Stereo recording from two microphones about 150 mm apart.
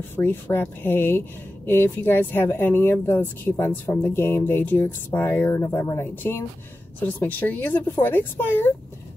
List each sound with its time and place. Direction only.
0.1 s speech: 15° left (ahead or behind)